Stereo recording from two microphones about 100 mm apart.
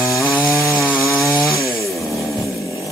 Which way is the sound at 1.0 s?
Centre (ahead or behind).